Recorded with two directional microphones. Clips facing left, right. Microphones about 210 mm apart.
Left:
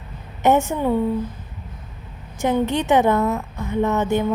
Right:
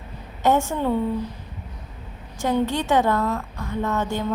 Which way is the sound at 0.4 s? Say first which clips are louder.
Left 3 dB; 20° left (ahead or behind).